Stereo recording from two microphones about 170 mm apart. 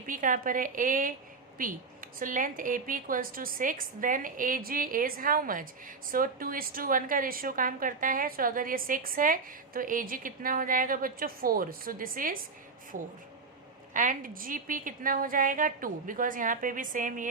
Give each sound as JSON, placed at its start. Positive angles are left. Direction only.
{"t": 0.1, "sound": "a woman's voice", "side_deg": -50}